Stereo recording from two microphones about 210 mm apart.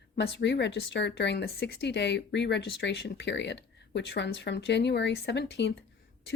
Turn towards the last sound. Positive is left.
turn(degrees=55)  # may be behind; listen again after turning